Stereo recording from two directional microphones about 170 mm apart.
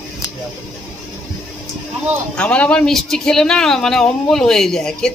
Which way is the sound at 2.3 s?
5° left (ahead or behind).